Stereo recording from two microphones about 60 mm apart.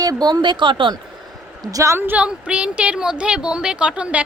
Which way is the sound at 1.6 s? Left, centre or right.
Right.